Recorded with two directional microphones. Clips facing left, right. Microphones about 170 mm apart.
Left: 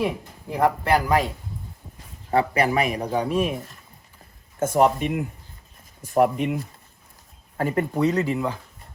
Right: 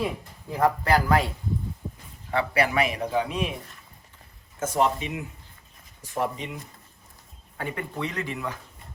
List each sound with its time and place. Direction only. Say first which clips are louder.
0.5 s speech: left 2 dB; 20° left (ahead or behind)
2.3 s speech: left 3 dB; 40° left (ahead or behind)
4.6 s speech: left 5 dB; 55° left (ahead or behind)
7.5 s speech: left 9 dB; 45° left (ahead or behind)